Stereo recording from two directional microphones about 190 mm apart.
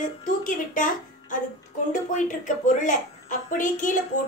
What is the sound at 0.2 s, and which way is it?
A woman's voice, 45° left (ahead or behind).